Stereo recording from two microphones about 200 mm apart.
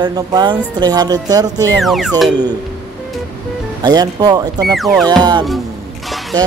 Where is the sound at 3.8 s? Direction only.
20° right (ahead or behind).